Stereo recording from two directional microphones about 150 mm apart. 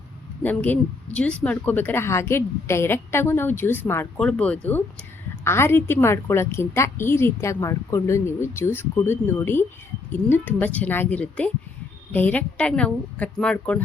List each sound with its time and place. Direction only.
0.4 s a woman's voice: 10° left (ahead or behind)